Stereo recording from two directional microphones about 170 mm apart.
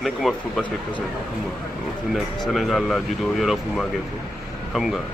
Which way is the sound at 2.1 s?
Centre (ahead or behind).